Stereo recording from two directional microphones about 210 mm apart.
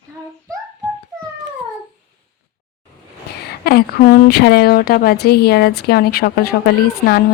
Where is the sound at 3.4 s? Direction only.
50° left (ahead or behind).